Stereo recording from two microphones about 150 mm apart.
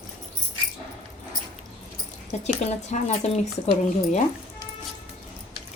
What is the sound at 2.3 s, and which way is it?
Speech, 50° left (ahead or behind).